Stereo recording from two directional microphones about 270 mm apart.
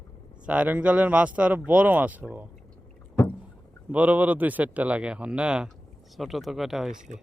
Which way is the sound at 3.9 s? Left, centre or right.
Centre.